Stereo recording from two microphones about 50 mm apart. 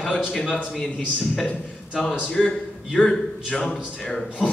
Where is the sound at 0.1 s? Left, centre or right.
Centre.